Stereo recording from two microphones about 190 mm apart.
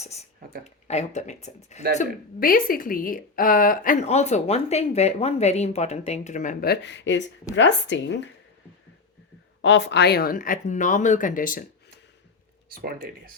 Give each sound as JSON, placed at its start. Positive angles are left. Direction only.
{"t": 0.0, "sound": "speech", "side_deg": 35}
{"t": 2.0, "sound": "a woman's voice", "side_deg": 50}
{"t": 9.6, "sound": "a woman's voice", "side_deg": 70}
{"t": 12.7, "sound": "speech", "side_deg": -55}